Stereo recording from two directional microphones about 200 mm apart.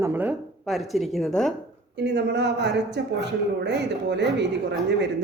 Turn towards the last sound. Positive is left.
turn(degrees=-60)  # may be behind; listen again after turning